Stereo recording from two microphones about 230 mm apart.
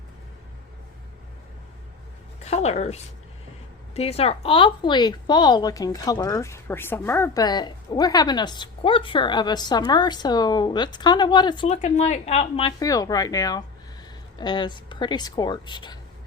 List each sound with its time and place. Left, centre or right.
2.4 s a woman's voice: left